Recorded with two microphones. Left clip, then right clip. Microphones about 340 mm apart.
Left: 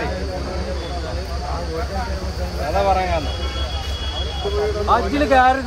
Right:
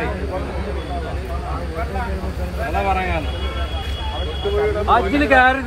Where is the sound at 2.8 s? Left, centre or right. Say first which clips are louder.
Left 3 dB; left.